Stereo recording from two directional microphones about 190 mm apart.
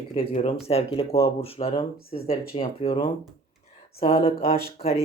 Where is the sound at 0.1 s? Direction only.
30° left (ahead or behind).